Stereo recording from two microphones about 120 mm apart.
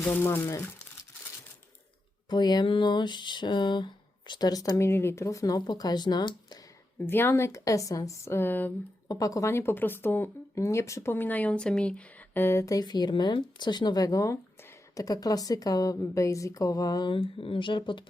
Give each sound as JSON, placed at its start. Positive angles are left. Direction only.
{"t": 0.0, "sound": "speech", "side_deg": 15}
{"t": 2.3, "sound": "speech", "side_deg": 35}
{"t": 7.1, "sound": "speech", "side_deg": 20}
{"t": 9.0, "sound": "speech", "side_deg": 30}
{"t": 17.1, "sound": "speech", "side_deg": 50}